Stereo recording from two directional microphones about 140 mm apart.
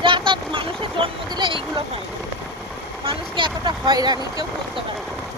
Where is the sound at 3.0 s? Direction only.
40° right (ahead or behind).